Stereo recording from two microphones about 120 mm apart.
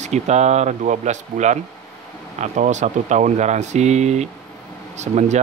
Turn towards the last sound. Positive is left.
turn(degrees=-75)  # may be behind; listen again after turning